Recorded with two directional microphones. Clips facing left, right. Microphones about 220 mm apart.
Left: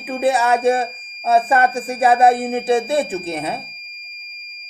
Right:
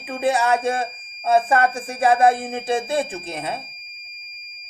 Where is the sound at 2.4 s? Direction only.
5° left (ahead or behind).